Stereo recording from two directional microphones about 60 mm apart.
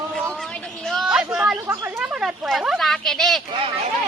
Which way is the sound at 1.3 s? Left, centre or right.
Centre.